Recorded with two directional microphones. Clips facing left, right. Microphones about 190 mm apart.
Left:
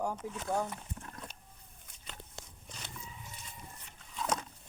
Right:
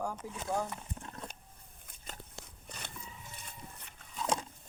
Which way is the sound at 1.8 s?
45° right (ahead or behind).